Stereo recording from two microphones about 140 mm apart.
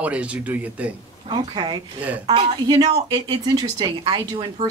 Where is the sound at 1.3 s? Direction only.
35° right (ahead or behind).